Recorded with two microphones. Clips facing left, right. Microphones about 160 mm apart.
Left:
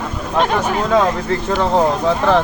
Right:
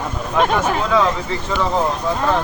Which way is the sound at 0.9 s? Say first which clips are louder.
Left 2 dB; 55° left (ahead or behind).